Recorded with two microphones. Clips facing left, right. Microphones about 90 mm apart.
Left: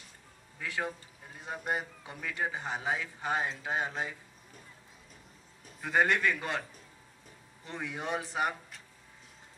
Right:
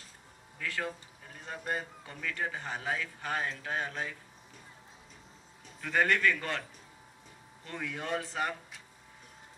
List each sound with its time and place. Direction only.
0.6 s a man's voice: 15° left (ahead or behind)
5.8 s a man's voice: 15° left (ahead or behind)
7.6 s a man's voice: 15° left (ahead or behind)